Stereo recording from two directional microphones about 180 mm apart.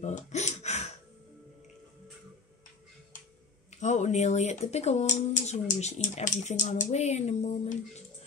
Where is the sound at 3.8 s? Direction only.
40° left (ahead or behind).